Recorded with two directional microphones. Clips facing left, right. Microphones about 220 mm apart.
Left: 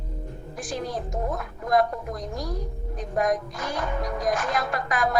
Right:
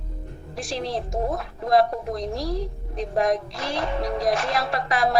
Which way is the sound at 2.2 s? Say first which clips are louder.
Right 5 dB; 75° right (ahead or behind).